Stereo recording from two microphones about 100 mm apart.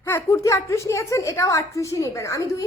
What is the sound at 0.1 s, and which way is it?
A woman's voice, 30° left (ahead or behind).